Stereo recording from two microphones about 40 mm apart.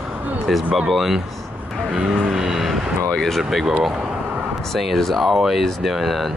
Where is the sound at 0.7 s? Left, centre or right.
Centre.